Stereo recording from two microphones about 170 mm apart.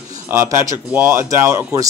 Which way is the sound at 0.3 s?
20° right (ahead or behind).